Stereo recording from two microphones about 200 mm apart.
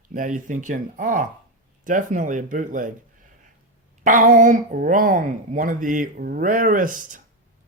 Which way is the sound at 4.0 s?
40° right (ahead or behind).